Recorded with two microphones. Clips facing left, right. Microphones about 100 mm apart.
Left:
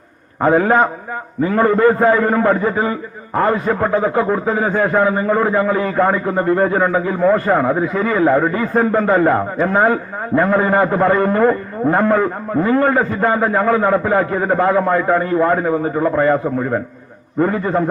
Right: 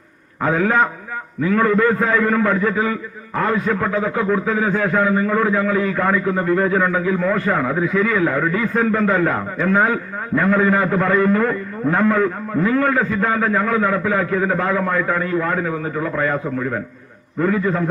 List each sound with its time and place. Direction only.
0.4 s a man's voice: 30° left (ahead or behind)